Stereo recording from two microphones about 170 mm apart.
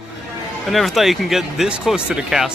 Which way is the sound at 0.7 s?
Centre (ahead or behind).